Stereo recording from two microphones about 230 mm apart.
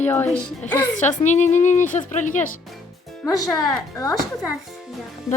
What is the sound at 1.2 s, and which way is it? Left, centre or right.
A woman's voice, left.